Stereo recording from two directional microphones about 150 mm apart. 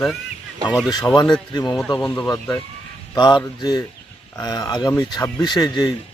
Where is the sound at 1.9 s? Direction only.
15° left (ahead or behind).